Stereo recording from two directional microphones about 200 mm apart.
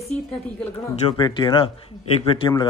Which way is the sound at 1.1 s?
25° left (ahead or behind).